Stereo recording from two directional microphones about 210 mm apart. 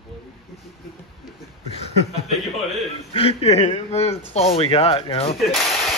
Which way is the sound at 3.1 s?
30° left (ahead or behind).